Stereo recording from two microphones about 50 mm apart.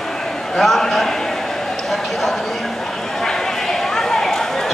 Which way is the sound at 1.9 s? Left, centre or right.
Centre.